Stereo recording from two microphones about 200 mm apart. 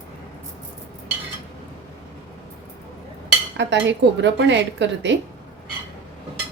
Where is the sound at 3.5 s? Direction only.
65° right (ahead or behind).